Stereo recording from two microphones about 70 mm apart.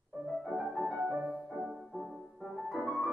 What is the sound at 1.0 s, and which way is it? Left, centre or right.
Music, right.